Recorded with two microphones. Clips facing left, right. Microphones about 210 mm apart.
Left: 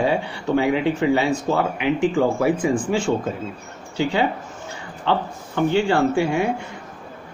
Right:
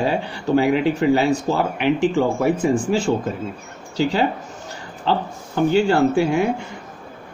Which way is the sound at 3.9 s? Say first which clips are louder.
Right 1 dB; 40° right (ahead or behind).